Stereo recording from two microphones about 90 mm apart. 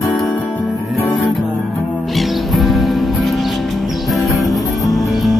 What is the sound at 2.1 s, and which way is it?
Music, centre (ahead or behind).